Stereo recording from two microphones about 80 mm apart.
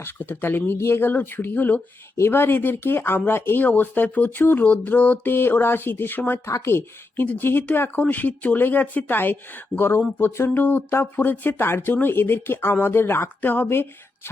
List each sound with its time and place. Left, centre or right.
0.0 s speech: left